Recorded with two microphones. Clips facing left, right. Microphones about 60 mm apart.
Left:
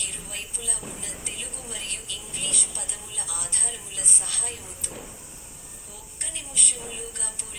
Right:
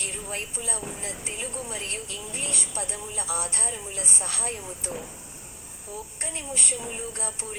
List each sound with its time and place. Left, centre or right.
0.0 s a woman's voice: right
6.2 s a woman's voice: right